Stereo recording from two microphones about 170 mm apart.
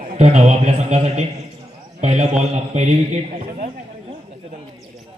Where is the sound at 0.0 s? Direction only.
40° right (ahead or behind).